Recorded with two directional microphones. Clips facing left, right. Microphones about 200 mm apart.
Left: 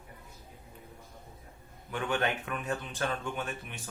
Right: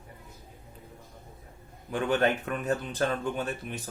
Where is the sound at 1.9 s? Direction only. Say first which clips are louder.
Right 6 dB; 35° right (ahead or behind).